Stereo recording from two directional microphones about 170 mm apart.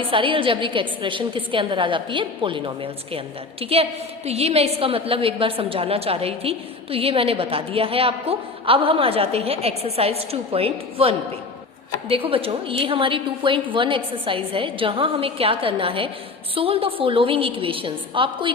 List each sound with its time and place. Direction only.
0.1 s a woman's voice: 30° right (ahead or behind)